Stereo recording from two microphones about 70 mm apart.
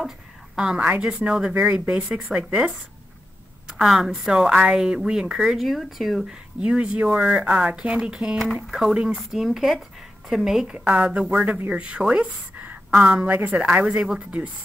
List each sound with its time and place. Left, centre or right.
0.7 s a woman's voice: centre
2.3 s speech: centre
3.6 s speech: centre
6.6 s a woman's voice: centre
13.8 s speech: centre